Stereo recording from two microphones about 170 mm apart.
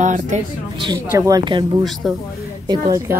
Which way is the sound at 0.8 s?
25° right (ahead or behind).